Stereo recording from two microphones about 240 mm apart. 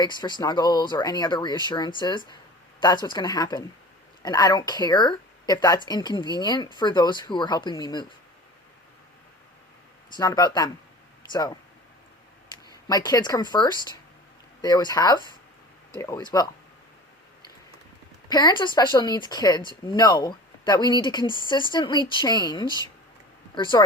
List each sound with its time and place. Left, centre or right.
0.0 s speech: centre
10.2 s speech: centre
12.9 s speech: centre
18.3 s speech: centre